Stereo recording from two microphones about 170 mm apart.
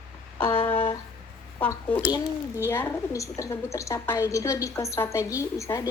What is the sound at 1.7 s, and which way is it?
A woman's voice, 10° left (ahead or behind).